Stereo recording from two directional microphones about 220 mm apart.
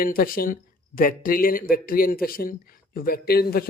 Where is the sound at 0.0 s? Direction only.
40° left (ahead or behind).